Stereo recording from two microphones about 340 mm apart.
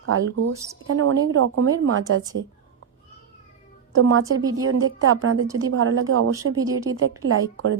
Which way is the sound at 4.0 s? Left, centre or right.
Right.